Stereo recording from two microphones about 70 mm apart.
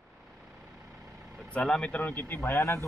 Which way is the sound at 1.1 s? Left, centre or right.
Right.